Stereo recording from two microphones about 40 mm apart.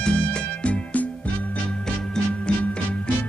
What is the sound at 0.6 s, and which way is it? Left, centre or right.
Music, left.